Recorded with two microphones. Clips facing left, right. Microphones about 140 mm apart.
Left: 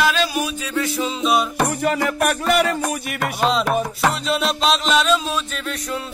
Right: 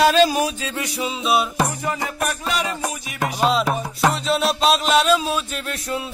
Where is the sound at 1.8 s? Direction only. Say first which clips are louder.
Left 5 dB; 70° left (ahead or behind).